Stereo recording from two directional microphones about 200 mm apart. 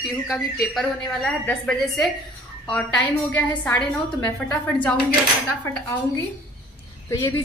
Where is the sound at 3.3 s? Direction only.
10° left (ahead or behind).